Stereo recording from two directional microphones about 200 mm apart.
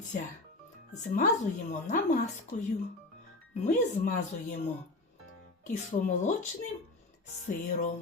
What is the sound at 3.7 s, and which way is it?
Speech, 35° left (ahead or behind).